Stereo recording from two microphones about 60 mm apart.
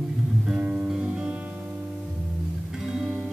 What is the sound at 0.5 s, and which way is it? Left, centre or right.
Music, centre.